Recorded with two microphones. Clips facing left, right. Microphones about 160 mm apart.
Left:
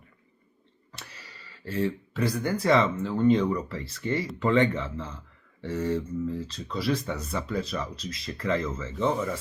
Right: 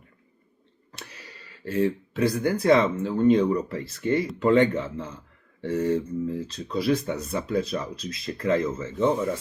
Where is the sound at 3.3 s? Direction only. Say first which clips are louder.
Right 3 dB; 45° right (ahead or behind).